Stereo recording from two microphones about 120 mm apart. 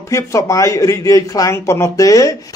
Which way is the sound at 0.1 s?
25° left (ahead or behind).